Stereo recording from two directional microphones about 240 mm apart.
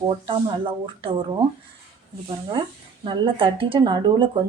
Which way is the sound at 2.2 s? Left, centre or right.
Right.